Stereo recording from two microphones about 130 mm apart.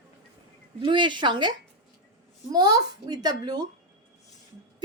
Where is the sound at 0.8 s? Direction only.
35° right (ahead or behind).